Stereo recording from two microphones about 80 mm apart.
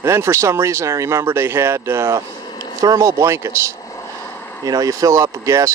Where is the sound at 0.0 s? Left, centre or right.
Right.